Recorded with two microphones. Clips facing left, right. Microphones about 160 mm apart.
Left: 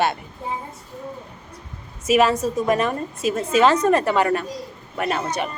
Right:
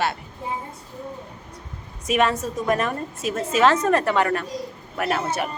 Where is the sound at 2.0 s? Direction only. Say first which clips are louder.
Left 4 dB; 5° left (ahead or behind).